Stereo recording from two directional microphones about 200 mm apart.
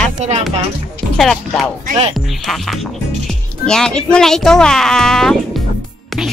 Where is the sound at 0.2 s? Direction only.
35° right (ahead or behind).